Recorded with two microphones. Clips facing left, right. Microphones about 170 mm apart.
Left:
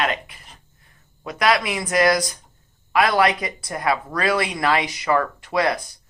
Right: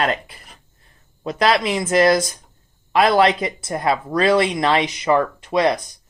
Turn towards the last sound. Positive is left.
turn(degrees=-20)  # may be behind; listen again after turning